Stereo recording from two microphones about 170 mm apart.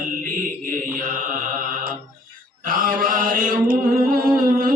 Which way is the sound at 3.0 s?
55° right (ahead or behind).